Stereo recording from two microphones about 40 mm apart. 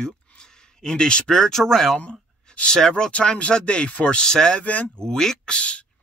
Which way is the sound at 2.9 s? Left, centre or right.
Left.